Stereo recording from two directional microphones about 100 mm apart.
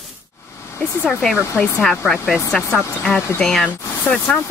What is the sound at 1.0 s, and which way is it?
Speech, 5° left (ahead or behind).